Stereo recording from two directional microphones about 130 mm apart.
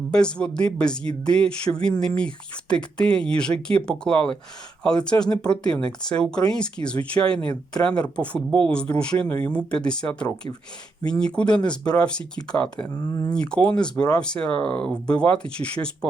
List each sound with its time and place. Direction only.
0.1 s speech: 5° left (ahead or behind)
13.0 s speech: 30° left (ahead or behind)
13.3 s speech: 5° left (ahead or behind)